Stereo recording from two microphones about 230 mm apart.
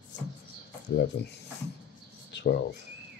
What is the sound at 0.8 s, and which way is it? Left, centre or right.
Speech, left.